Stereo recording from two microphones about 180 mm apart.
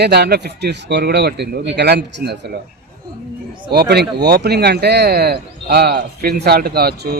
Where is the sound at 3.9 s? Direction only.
65° right (ahead or behind).